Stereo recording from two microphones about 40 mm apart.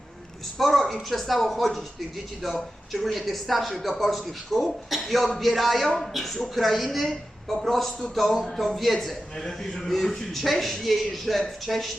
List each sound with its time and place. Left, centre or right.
0.6 s a man's voice: centre